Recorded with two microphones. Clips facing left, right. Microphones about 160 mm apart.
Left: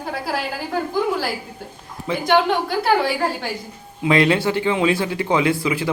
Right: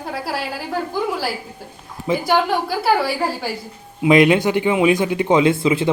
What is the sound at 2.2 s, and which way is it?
Speech, 5° right (ahead or behind).